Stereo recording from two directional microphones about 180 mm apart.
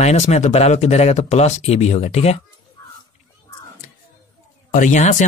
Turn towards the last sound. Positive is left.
turn(degrees=45)  # may be behind; listen again after turning